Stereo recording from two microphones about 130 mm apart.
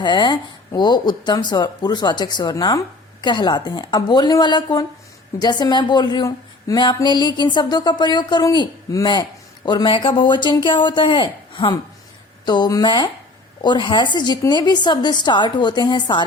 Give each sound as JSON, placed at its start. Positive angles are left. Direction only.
{"t": 0.0, "sound": "speech", "side_deg": 35}